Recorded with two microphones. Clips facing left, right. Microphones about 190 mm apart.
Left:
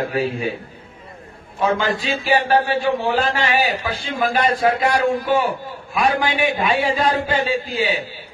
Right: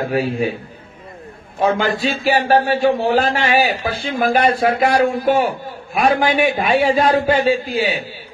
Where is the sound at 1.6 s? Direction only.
40° right (ahead or behind).